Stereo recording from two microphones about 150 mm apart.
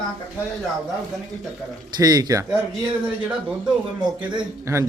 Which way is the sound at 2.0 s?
25° right (ahead or behind).